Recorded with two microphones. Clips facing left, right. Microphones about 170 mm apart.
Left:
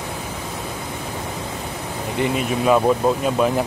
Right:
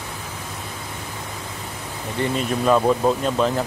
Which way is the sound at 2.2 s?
10° left (ahead or behind).